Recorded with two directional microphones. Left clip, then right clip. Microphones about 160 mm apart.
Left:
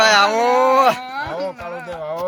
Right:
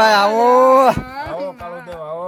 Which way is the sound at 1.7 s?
45° left (ahead or behind).